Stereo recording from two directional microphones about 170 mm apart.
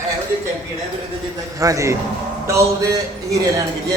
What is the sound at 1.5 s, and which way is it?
Speech, 20° right (ahead or behind).